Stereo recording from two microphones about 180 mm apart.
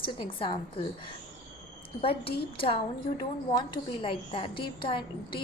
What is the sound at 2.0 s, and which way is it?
A woman's voice, 30° left (ahead or behind).